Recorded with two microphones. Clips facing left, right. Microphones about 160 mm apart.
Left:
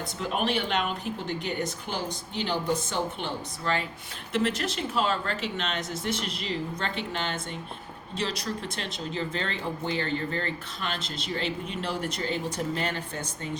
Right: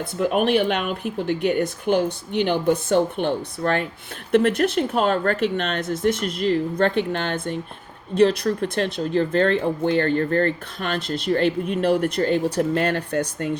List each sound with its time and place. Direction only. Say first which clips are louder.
0.2 s speech: right 9 dB; 55° right (ahead or behind)